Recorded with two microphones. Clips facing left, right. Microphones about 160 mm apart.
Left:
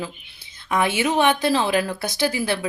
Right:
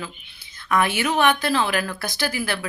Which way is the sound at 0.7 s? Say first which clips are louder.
Left 1 dB; 25° left (ahead or behind).